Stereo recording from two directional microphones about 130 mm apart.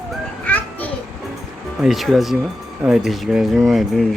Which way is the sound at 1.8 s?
Centre (ahead or behind).